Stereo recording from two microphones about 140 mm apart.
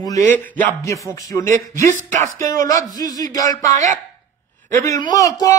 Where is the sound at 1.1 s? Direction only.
25° left (ahead or behind).